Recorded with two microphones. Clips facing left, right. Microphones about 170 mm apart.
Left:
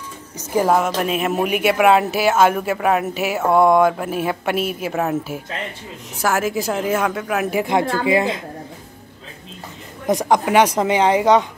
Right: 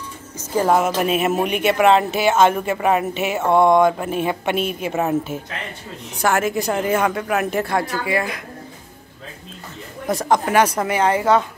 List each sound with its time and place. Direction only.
0.7 s speech: 5° right (ahead or behind)
6.2 s speech: centre (ahead or behind)
7.6 s speech: 25° left (ahead or behind)
10.0 s a woman's voice: 15° left (ahead or behind)